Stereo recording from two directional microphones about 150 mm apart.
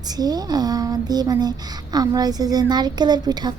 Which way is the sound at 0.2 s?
25° right (ahead or behind).